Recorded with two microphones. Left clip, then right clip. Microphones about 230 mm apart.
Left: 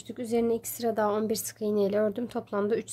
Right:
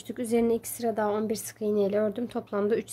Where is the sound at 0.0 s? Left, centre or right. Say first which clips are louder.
Right 2 dB; centre.